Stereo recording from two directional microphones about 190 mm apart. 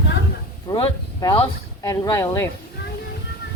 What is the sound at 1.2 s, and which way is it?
A woman's voice, 15° left (ahead or behind).